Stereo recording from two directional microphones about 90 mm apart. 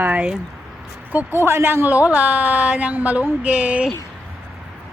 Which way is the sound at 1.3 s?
30° right (ahead or behind).